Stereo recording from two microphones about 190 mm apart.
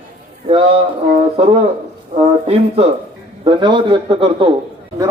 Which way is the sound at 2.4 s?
35° right (ahead or behind).